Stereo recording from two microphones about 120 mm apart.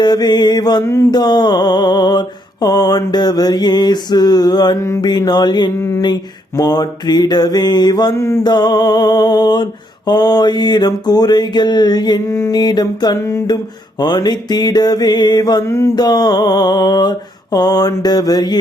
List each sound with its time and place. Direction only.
0.0 s mantra: 35° left (ahead or behind)
8.1 s mantra: 20° left (ahead or behind)
8.4 s mantra: 35° left (ahead or behind)
13.1 s mantra: 25° left (ahead or behind)
14.0 s mantra: 35° left (ahead or behind)
15.6 s mantra: 20° left (ahead or behind)
16.0 s mantra: 35° left (ahead or behind)